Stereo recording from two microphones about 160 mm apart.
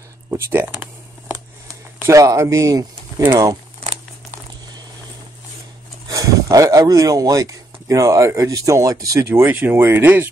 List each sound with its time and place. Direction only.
0.3 s speech: 15° right (ahead or behind)
2.0 s speech: 20° right (ahead or behind)
6.0 s speech: 20° right (ahead or behind)